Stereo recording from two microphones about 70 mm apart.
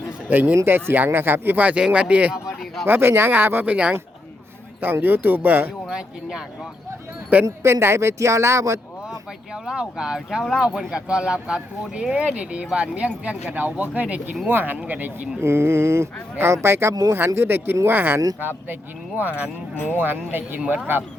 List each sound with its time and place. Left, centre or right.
0.3 s speech: right
2.8 s speech: right
4.8 s speech: right
5.8 s speech: centre
7.4 s speech: right
9.6 s speech: centre; by 15.3 s right
15.4 s speech: right